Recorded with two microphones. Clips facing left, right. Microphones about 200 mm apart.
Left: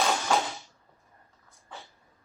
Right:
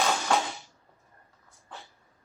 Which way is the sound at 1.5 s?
Centre (ahead or behind).